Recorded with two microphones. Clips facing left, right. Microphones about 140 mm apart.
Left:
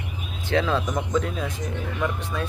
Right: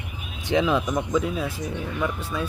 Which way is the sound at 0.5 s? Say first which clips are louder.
Right 2 dB; 15° right (ahead or behind).